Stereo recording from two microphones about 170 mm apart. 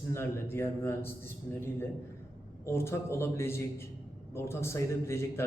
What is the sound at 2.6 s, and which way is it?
A man's voice, 15° left (ahead or behind).